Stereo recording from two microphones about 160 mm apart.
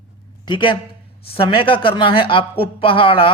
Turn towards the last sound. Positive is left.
turn(degrees=35)  # may be behind; listen again after turning